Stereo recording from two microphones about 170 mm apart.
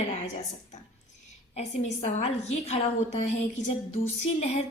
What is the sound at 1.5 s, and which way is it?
A woman's voice, 45° left (ahead or behind).